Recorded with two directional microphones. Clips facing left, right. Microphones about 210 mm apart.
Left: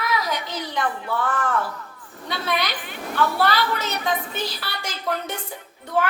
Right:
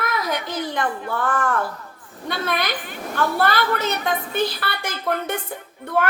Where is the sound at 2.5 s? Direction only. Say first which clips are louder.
Right 1 dB; 50° right (ahead or behind).